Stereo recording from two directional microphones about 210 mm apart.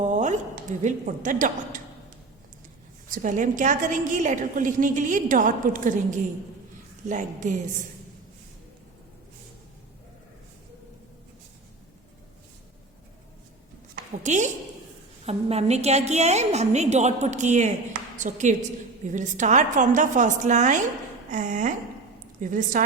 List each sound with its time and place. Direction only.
0.0 s a sound: 35° right (ahead or behind)
0.8 s a woman's voice: 35° right (ahead or behind)
3.1 s a woman's voice: 40° right (ahead or behind)
14.2 s a woman's voice: 35° right (ahead or behind)